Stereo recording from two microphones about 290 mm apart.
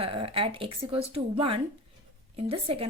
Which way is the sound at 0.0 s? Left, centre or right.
Centre.